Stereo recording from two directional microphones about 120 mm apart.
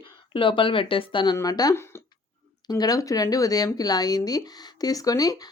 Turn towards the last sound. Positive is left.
turn(degrees=30)  # may be behind; listen again after turning